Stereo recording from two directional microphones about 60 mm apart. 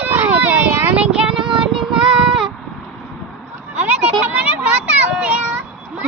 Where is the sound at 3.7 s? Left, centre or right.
Right.